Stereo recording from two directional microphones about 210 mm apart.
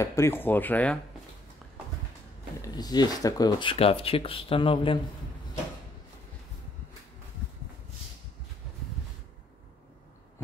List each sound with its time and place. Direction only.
0.0 s speech: 10° left (ahead or behind)
2.6 s speech: 20° left (ahead or behind)